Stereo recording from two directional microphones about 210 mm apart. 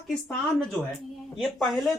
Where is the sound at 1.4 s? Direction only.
Centre (ahead or behind).